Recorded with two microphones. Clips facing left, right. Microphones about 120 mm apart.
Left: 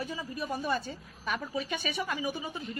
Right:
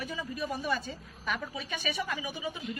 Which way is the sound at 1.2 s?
35° left (ahead or behind).